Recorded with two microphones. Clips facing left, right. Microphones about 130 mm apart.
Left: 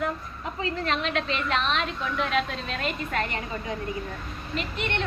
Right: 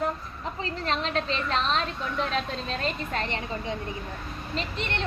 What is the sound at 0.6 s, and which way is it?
A woman's voice, 35° right (ahead or behind).